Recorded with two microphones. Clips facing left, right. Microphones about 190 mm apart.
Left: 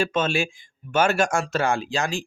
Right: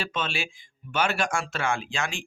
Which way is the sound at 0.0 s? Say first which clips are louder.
Left 8 dB; 45° left (ahead or behind).